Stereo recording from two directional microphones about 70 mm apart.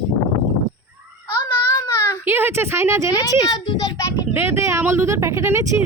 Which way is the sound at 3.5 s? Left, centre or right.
Left.